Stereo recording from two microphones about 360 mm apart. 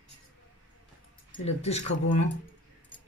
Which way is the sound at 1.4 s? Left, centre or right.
Centre.